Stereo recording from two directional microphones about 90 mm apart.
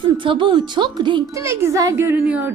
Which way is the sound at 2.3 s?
20° right (ahead or behind).